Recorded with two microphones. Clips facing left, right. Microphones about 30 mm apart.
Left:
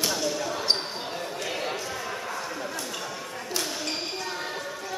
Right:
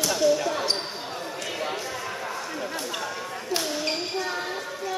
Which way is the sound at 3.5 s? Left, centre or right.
Right.